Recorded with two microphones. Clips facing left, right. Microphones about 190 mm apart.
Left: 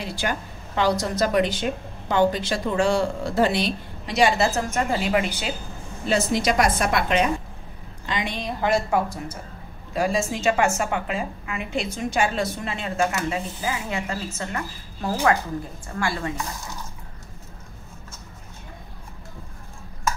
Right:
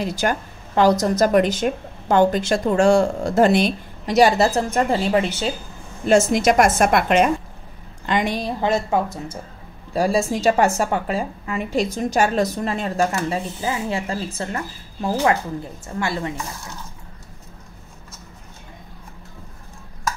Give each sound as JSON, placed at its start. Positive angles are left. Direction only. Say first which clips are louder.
{"t": 0.0, "sound": "a woman's voice", "louder": "right 6 dB", "side_deg": -45}
{"t": 6.0, "sound": "a woman's voice", "louder": "right 6 dB", "side_deg": -50}
{"t": 8.4, "sound": "speech", "louder": "right 2 dB", "side_deg": -25}
{"t": 9.9, "sound": "a woman's voice", "louder": "right 4 dB", "side_deg": -35}
{"t": 16.0, "sound": "speech", "louder": "right 2 dB", "side_deg": -25}